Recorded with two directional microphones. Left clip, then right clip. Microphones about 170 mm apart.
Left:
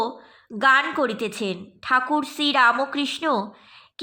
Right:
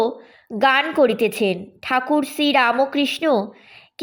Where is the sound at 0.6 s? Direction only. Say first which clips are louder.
Right 3 dB; 25° right (ahead or behind).